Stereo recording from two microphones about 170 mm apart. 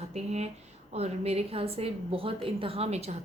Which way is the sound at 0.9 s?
40° right (ahead or behind).